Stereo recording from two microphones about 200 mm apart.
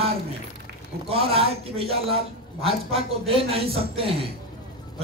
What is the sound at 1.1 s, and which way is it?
Speech, 30° right (ahead or behind).